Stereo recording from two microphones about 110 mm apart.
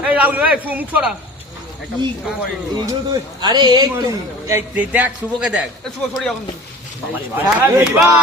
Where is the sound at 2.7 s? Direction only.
40° right (ahead or behind).